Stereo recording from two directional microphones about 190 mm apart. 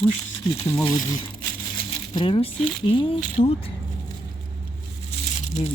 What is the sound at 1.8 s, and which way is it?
Coin, 30° left (ahead or behind).